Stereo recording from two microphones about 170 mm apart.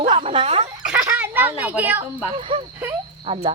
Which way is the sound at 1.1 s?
10° right (ahead or behind).